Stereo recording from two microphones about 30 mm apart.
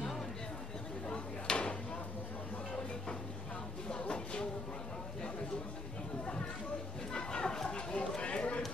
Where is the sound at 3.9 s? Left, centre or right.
Left.